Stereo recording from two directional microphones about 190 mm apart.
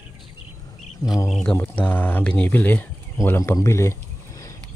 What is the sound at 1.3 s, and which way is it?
Speech, 5° left (ahead or behind).